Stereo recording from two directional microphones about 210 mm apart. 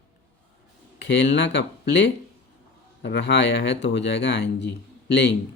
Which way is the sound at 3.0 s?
55° left (ahead or behind).